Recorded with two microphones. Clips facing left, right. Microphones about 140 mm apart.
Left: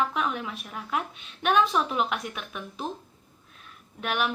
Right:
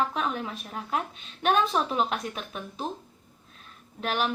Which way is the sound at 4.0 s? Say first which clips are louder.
Even; 35° right (ahead or behind).